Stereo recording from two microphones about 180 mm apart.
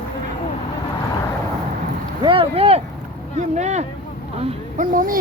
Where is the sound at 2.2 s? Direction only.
30° right (ahead or behind).